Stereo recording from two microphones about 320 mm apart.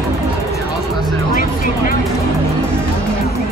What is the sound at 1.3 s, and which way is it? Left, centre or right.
Music, left.